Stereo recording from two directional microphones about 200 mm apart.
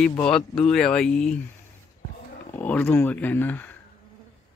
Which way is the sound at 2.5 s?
10° left (ahead or behind).